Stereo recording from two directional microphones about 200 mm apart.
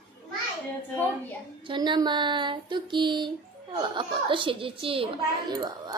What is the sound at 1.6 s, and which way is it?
A child's voice, 25° right (ahead or behind).